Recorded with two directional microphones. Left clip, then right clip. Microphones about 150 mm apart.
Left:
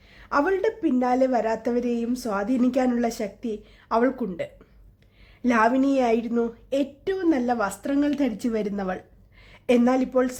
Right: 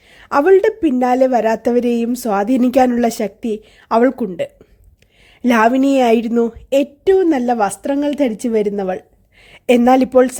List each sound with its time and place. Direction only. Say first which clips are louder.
0.2 s a woman's voice: right 11 dB; 50° right (ahead or behind)